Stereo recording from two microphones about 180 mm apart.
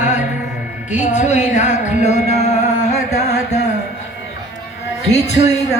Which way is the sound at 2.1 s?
40° left (ahead or behind).